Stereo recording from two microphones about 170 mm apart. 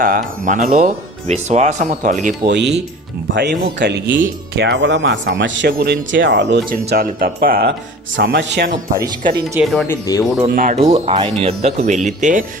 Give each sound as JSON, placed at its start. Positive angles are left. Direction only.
{"t": 0.0, "sound": "speech", "side_deg": -55}
{"t": 2.5, "sound": "speech", "side_deg": -90}
{"t": 8.6, "sound": "speech", "side_deg": -55}
{"t": 9.0, "sound": "speech", "side_deg": -25}
{"t": 9.6, "sound": "speech", "side_deg": 0}
{"t": 9.9, "sound": "speech", "side_deg": 20}
{"t": 10.5, "sound": "speech", "side_deg": -55}
{"t": 10.8, "sound": "speech", "side_deg": -35}